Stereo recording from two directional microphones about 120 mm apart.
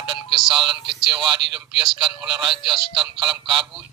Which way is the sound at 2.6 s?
40° right (ahead or behind).